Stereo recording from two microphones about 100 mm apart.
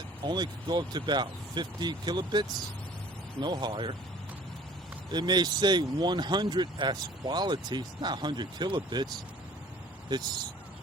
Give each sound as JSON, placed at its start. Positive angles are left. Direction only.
{"t": 0.3, "sound": "speech", "side_deg": -45}
{"t": 5.1, "sound": "speech", "side_deg": -45}
{"t": 10.1, "sound": "speech", "side_deg": -45}